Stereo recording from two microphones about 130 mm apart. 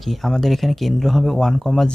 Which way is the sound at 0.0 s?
Centre (ahead or behind).